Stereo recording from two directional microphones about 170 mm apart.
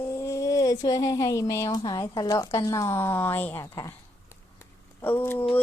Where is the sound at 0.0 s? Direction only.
15° left (ahead or behind).